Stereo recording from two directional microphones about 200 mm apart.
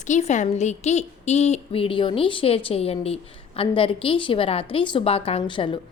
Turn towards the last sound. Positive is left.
turn(degrees=25)  # may be behind; listen again after turning